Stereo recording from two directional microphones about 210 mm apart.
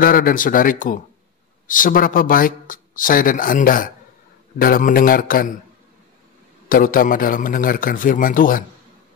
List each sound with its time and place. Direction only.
0.0 s a man's voice: 40° left (ahead or behind)
6.7 s speech: 40° left (ahead or behind)